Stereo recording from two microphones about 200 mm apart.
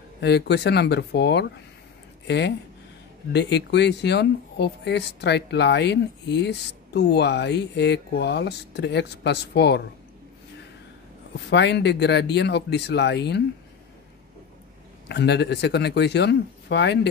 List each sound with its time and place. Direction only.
0.2 s speech: 55° left (ahead or behind)
11.5 s speech: 60° left (ahead or behind)
15.0 s speech: 55° left (ahead or behind)